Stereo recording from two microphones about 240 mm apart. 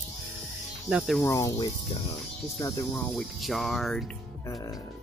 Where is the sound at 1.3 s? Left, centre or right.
Centre.